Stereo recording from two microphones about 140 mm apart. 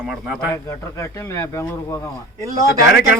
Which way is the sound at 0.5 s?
20° left (ahead or behind).